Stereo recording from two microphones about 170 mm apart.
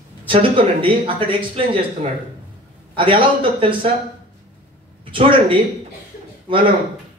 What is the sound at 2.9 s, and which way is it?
Speech, 30° right (ahead or behind).